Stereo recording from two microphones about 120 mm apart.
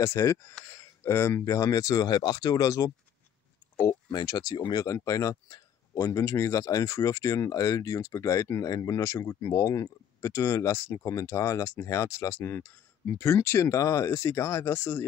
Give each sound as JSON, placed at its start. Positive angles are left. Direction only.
{"t": 0.0, "sound": "speech", "side_deg": 25}
{"t": 4.1, "sound": "speech", "side_deg": 35}